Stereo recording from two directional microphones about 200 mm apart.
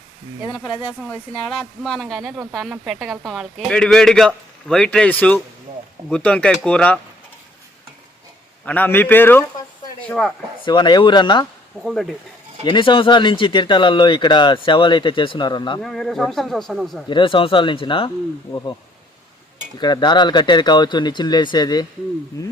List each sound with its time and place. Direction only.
0.5 s speech: centre (ahead or behind)
8.6 s a man's voice: 10° left (ahead or behind)
10.6 s speech: 20° left (ahead or behind)
11.8 s speech: centre (ahead or behind)
12.6 s speech: 25° left (ahead or behind)
15.8 s speech: centre (ahead or behind)
17.1 s speech: 25° left (ahead or behind)
19.8 s a man's voice: 20° left (ahead or behind)